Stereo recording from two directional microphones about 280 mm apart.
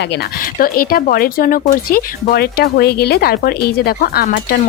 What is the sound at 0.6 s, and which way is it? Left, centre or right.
Speech, left.